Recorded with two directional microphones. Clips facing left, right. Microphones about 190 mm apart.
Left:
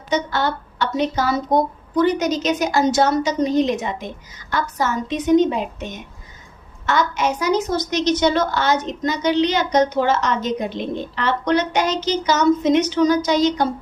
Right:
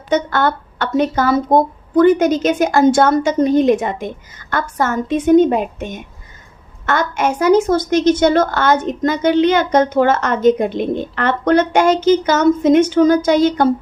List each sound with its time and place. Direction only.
0.1 s a woman's voice: 50° right (ahead or behind)